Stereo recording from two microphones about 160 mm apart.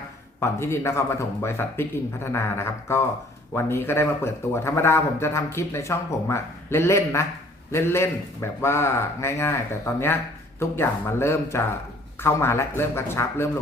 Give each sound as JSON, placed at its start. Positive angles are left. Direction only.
{"t": 0.3, "sound": "a man's voice", "side_deg": 15}